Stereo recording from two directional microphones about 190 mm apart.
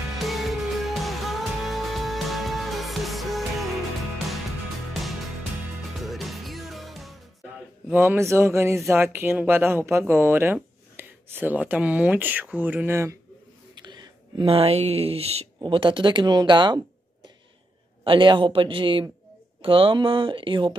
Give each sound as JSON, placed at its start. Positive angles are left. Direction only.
{"t": 0.2, "sound": "music", "side_deg": 0}
{"t": 5.9, "sound": "music", "side_deg": 0}
{"t": 7.9, "sound": "speech", "side_deg": -10}